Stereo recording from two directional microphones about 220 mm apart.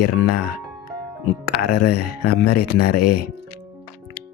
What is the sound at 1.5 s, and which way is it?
Speech, 45° left (ahead or behind).